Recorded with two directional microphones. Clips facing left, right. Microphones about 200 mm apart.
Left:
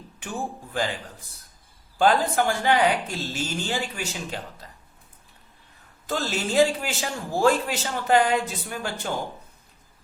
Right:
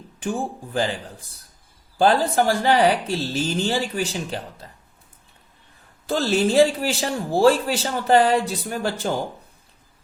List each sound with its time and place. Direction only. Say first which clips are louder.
0.2 s speech: right 6 dB; 30° right (ahead or behind)
2.0 s speech: right 3 dB; 35° right (ahead or behind)
6.1 s speech: right 7 dB; 35° right (ahead or behind)